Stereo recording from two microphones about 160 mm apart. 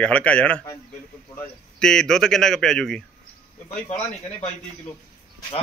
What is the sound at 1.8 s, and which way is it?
A man's voice, 5° left (ahead or behind).